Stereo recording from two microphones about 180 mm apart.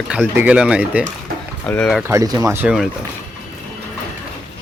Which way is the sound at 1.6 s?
5° left (ahead or behind).